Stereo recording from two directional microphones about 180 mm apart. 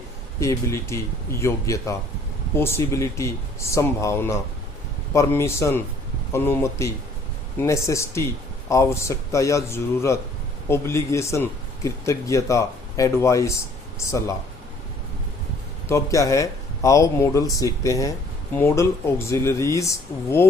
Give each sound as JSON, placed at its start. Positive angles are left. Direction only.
{"t": 0.3, "sound": "speech", "side_deg": 15}
{"t": 15.9, "sound": "speech", "side_deg": 20}